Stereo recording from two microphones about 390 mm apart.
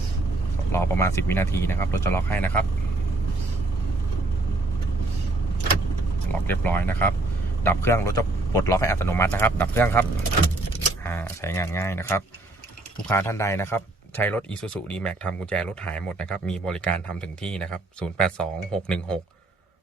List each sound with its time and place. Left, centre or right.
0.7 s speech: centre
6.5 s speech: centre